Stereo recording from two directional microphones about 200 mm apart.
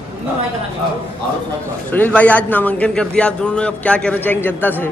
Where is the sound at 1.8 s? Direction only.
10° left (ahead or behind).